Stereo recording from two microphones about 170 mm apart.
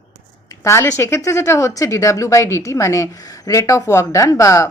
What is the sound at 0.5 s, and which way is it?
Speech, 15° left (ahead or behind).